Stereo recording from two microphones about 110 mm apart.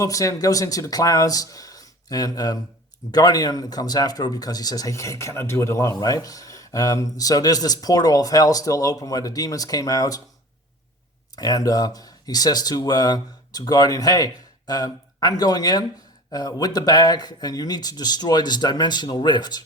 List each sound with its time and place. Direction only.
0.0 s speech: 30° left (ahead or behind)
11.3 s speech: 35° left (ahead or behind)